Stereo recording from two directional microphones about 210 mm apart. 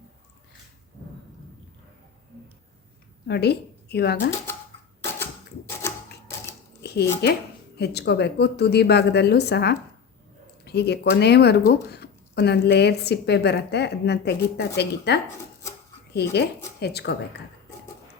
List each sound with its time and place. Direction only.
3.2 s a woman's voice: 50° left (ahead or behind)
5.2 s typewriter: 10° left (ahead or behind)
6.8 s speech: 50° left (ahead or behind)